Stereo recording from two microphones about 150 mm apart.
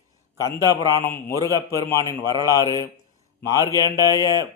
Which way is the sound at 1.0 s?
15° left (ahead or behind).